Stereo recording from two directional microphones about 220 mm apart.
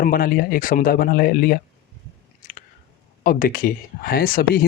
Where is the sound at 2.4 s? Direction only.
40° left (ahead or behind).